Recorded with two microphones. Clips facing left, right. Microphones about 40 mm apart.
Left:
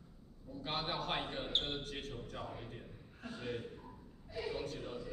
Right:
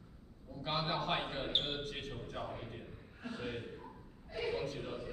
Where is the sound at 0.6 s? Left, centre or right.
Centre.